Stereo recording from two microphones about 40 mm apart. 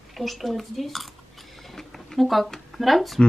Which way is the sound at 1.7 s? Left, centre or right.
Centre.